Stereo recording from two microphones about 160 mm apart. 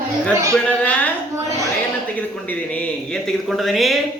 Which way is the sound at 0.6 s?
10° left (ahead or behind).